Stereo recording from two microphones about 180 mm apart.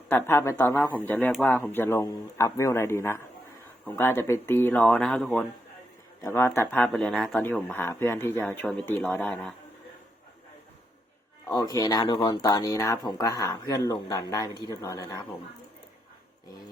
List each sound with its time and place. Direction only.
0.1 s speech: 10° left (ahead or behind)
11.4 s speech: 20° left (ahead or behind)